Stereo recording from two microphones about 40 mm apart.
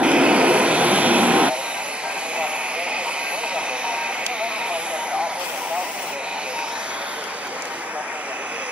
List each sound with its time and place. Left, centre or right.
0.0 s vehicle: right